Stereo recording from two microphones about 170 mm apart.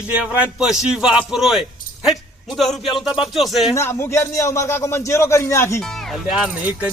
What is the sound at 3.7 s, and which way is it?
Speech, 15° left (ahead or behind).